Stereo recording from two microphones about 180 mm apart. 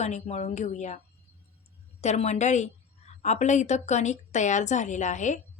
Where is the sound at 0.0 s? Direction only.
40° left (ahead or behind).